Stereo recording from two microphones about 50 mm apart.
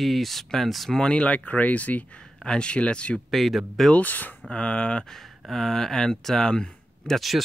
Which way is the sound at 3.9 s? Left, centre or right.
Left.